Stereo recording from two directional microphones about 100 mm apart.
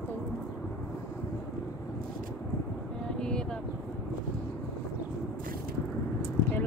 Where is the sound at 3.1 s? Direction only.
10° left (ahead or behind).